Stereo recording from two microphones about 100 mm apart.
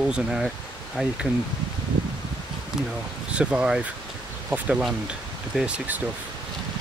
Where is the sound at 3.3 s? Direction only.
10° right (ahead or behind).